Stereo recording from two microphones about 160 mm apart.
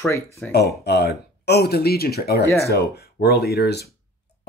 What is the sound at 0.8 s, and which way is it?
Speech, 90° left.